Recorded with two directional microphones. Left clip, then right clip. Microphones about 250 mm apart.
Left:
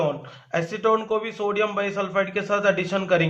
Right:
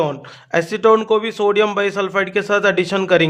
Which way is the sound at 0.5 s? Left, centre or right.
Right.